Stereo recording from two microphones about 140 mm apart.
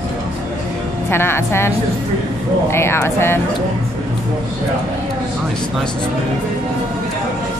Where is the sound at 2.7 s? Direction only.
20° left (ahead or behind).